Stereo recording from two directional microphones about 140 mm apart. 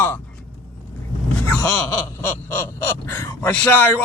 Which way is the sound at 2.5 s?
15° left (ahead or behind).